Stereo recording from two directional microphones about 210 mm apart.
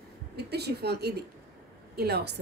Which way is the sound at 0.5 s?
50° right (ahead or behind).